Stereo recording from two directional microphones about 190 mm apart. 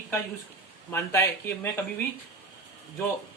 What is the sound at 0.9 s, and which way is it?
Speech, 15° left (ahead or behind).